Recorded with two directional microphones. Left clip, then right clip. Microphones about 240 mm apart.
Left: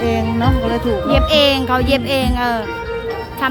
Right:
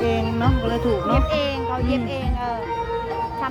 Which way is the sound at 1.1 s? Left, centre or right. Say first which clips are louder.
Left 9 dB; left.